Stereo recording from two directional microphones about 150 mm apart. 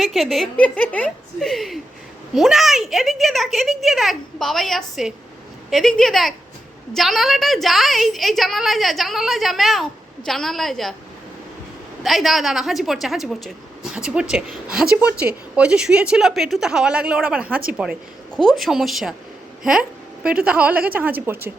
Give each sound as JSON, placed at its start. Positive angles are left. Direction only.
{"t": 0.0, "sound": "a woman's voice", "side_deg": 0}
{"t": 12.0, "sound": "a woman's voice", "side_deg": 0}
{"t": 20.2, "sound": "a woman's voice", "side_deg": -5}